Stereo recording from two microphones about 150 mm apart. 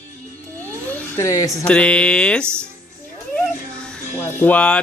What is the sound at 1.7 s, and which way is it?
A child's voice, 5° left (ahead or behind).